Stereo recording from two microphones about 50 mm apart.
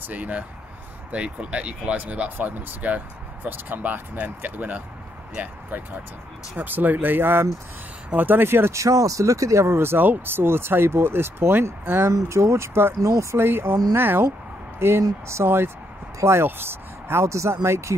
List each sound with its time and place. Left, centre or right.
0.0 s speech: right
3.4 s speech: right
6.5 s speech: right
8.7 s speech: right
9.8 s speech: right
12.3 s speech: right
13.0 s speech: right
13.4 s speech: right
14.8 s speech: right
15.4 s speech: right
17.3 s speech: right